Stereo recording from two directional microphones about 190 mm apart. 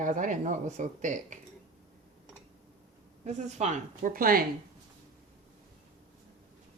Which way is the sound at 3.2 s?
35° right (ahead or behind).